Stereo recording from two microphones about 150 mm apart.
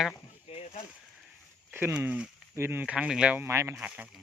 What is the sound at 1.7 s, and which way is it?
Speech, 15° right (ahead or behind).